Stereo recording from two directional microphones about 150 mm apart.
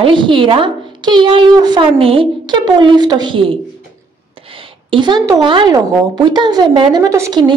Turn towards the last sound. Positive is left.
turn(degrees=-25)  # may be behind; listen again after turning